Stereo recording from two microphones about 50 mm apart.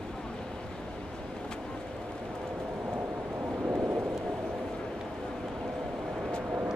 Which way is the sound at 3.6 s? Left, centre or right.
Right.